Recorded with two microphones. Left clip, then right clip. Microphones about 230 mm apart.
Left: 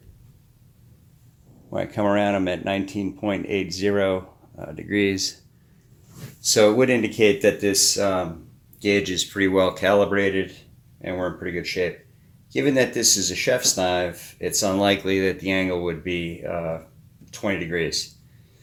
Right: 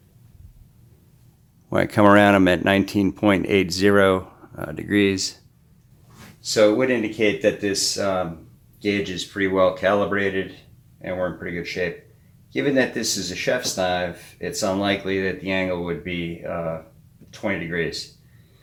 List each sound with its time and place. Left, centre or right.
1.7 s speech: right; by 5.1 s centre
5.1 s speech: centre
6.4 s speech: left